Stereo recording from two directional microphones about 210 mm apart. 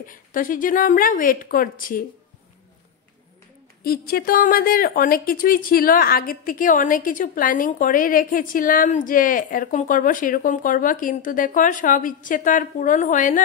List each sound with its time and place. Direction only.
0.1 s speech: 40° left (ahead or behind)
3.8 s speech: 45° left (ahead or behind)